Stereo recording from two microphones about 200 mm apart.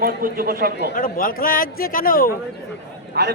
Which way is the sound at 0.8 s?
50° left (ahead or behind).